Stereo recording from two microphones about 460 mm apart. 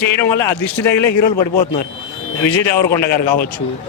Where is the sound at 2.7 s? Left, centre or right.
Left.